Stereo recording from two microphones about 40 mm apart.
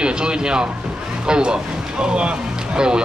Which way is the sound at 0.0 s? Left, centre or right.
Right.